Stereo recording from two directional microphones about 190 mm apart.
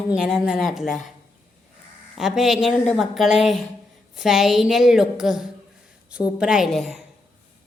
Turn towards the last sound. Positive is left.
turn(degrees=0)  # may be behind; listen again after turning